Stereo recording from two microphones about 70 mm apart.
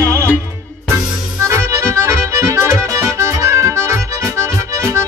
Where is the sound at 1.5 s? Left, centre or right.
Right.